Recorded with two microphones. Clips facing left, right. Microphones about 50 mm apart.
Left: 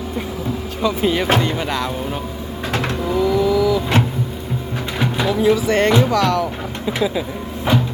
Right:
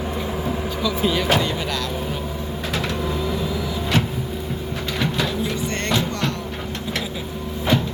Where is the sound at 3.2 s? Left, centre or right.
Left.